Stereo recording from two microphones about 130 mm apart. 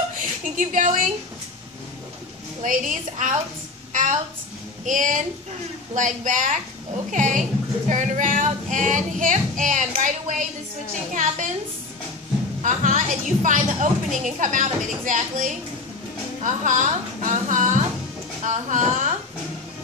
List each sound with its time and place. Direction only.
0.6 s a woman's voice: 90° right
2.6 s a woman's voice: 85° right
3.9 s a sound: 75° right (ahead or behind)
4.8 s a woman's voice: 80° right
12.6 s a woman's voice: 75° right (ahead or behind)